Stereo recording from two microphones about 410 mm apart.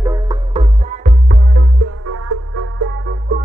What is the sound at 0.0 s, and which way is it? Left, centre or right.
Music, centre.